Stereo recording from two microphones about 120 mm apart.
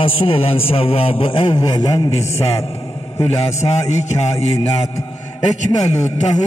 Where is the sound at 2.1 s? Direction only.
55° left (ahead or behind).